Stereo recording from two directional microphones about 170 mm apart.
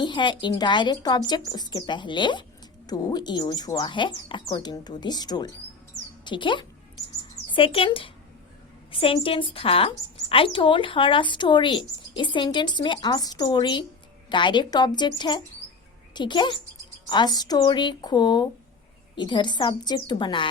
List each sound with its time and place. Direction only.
0.0 s a woman's voice: 30° left (ahead or behind)